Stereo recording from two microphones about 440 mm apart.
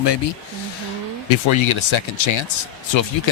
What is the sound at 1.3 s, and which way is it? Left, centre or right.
A man's voice, left.